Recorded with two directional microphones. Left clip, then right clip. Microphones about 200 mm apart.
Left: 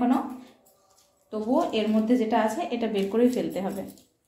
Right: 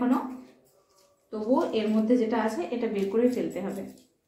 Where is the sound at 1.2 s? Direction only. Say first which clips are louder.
Left 1 dB; 40° left (ahead or behind).